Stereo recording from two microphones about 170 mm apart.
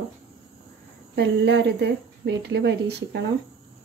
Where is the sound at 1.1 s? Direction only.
85° right.